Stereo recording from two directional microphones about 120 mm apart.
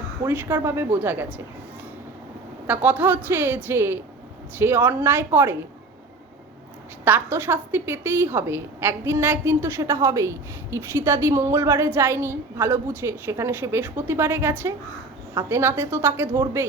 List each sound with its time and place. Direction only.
0.2 s a woman's voice: 20° right (ahead or behind)
2.6 s a woman's voice: 15° right (ahead or behind)
7.0 s a woman's voice: 20° right (ahead or behind)